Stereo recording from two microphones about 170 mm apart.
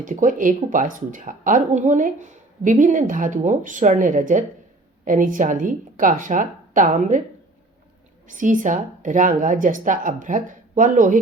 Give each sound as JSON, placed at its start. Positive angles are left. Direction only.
{"t": 0.0, "sound": "speech", "side_deg": -50}
{"t": 8.3, "sound": "speech", "side_deg": -50}